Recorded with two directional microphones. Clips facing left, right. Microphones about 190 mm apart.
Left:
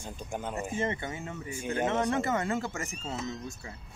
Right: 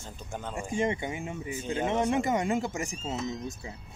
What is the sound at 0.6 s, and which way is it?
Speech, 15° right (ahead or behind).